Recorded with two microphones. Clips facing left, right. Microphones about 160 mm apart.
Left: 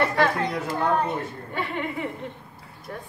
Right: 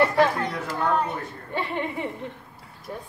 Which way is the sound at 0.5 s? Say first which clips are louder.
Left 1 dB; 20° left (ahead or behind).